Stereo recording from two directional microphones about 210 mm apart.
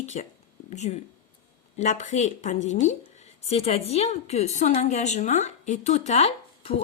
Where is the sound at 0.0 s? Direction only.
30° left (ahead or behind).